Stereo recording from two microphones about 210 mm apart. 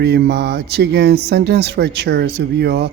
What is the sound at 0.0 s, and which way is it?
Speech, 50° right (ahead or behind).